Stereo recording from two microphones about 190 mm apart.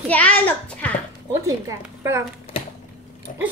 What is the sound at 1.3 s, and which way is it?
Speech, 15° right (ahead or behind).